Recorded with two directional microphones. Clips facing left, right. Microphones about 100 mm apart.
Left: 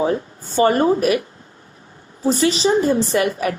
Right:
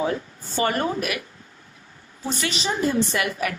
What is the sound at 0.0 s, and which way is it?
Speech, 30° left (ahead or behind).